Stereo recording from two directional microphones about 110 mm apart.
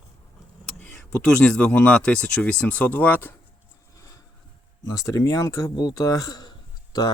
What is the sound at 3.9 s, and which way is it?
Vehicle, 30° left (ahead or behind).